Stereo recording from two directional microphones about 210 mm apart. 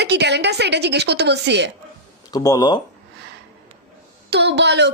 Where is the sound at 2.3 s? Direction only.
15° left (ahead or behind).